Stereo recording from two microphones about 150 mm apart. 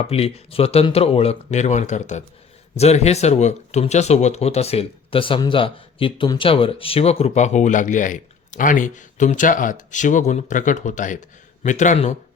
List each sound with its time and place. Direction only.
0.0 s a man's voice: 40° left (ahead or behind)